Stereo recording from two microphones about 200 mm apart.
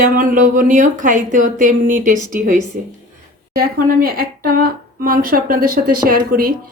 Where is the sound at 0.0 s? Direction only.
45° right (ahead or behind).